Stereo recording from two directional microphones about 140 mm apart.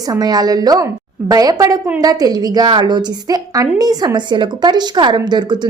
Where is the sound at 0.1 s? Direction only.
30° right (ahead or behind).